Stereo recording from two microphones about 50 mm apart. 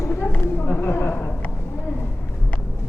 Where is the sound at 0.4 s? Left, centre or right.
Left.